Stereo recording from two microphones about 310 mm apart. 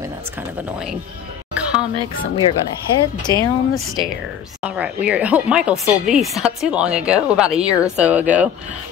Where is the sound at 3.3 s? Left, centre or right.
Centre.